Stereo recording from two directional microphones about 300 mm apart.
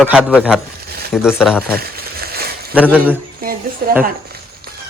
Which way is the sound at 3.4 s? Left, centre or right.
Right.